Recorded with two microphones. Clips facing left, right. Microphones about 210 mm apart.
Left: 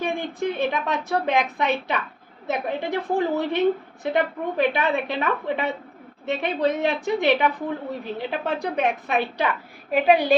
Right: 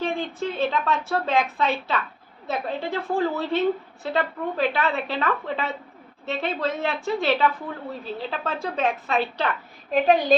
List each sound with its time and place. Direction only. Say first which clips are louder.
0.0 s a woman's voice: left 1 dB; 15° left (ahead or behind)